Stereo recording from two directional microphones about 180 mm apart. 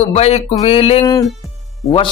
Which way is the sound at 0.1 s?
35° left (ahead or behind).